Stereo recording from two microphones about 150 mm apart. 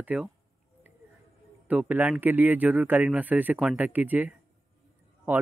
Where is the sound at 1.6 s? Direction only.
10° right (ahead or behind).